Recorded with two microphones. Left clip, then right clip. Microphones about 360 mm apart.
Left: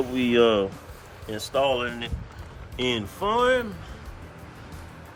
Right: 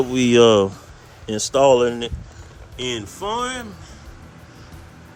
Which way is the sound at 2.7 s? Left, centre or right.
Centre.